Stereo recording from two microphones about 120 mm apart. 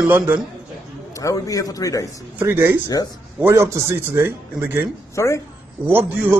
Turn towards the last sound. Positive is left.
turn(degrees=-20)  # may be behind; listen again after turning